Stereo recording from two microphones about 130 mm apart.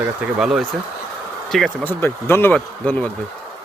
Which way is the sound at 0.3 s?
5° right (ahead or behind).